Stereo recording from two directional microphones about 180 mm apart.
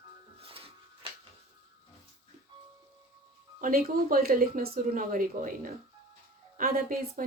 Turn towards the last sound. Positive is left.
turn(degrees=-50)  # may be behind; listen again after turning